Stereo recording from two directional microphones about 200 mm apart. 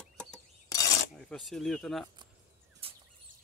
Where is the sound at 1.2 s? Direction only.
5° left (ahead or behind).